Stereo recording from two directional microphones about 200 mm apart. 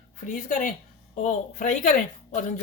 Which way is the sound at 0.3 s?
40° left (ahead or behind).